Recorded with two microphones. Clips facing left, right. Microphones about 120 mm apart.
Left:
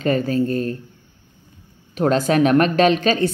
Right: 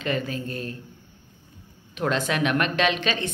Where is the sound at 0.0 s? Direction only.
40° left (ahead or behind).